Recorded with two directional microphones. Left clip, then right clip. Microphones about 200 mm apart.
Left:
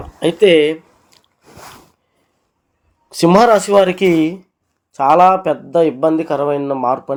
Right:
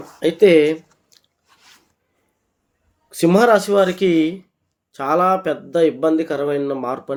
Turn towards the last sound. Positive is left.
turn(degrees=5)  # may be behind; listen again after turning